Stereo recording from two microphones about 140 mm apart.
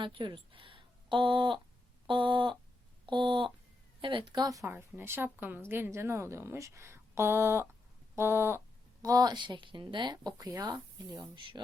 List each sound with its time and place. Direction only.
0.0 s speech: 35° right (ahead or behind)
2.0 s a sound: 35° right (ahead or behind)
4.0 s a woman's voice: 35° right (ahead or behind)